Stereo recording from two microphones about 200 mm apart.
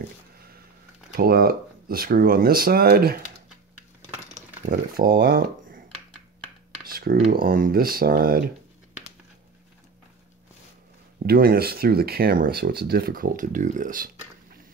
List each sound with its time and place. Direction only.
1.1 s speech: 50° right (ahead or behind)
4.3 s speech: 45° right (ahead or behind)
6.8 s a sound: 45° right (ahead or behind)
7.2 s speech: 45° right (ahead or behind)
11.2 s speech: 50° right (ahead or behind)